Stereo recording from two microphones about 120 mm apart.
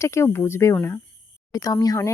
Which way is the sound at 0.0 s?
25° left (ahead or behind).